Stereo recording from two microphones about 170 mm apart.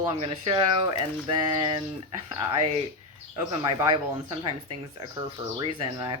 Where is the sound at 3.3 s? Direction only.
25° right (ahead or behind).